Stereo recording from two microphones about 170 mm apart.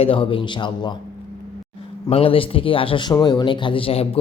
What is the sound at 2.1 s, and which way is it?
A man's voice, 35° left (ahead or behind).